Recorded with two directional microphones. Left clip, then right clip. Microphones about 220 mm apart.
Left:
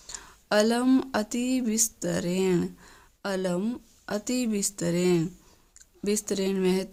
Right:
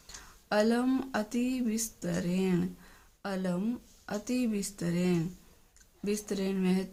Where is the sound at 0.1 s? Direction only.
50° left (ahead or behind).